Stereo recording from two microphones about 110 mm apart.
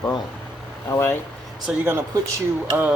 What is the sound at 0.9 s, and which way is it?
Speech, 20° left (ahead or behind).